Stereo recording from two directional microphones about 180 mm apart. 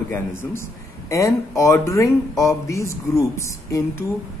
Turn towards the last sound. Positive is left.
turn(degrees=15)  # may be behind; listen again after turning